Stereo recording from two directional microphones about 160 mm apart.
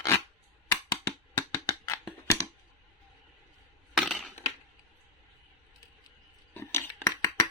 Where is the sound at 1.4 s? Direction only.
20° left (ahead or behind).